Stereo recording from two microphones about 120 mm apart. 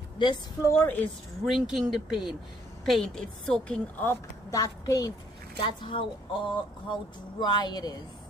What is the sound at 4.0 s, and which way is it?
Speech, 20° left (ahead or behind).